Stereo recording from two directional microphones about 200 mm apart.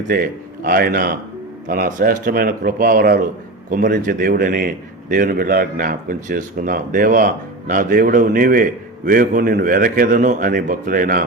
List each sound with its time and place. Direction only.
0.1 s a man's voice: 45° right (ahead or behind)